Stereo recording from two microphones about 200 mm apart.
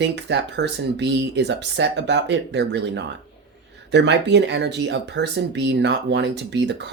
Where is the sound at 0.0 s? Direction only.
60° right (ahead or behind).